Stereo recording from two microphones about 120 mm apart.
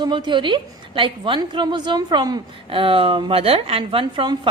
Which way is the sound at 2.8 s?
45° right (ahead or behind).